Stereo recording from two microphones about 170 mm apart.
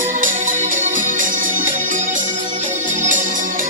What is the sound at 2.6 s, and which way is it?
Organ, 50° right (ahead or behind).